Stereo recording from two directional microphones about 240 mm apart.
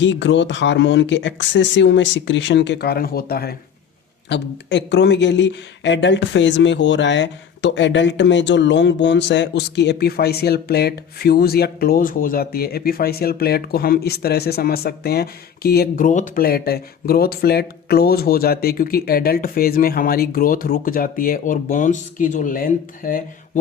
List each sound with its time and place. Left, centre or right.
0.0 s speech: left